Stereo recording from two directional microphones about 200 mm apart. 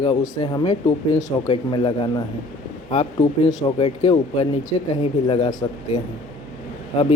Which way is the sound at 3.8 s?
25° left (ahead or behind).